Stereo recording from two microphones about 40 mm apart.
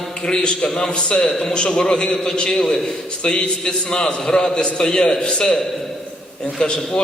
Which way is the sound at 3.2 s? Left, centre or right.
Left.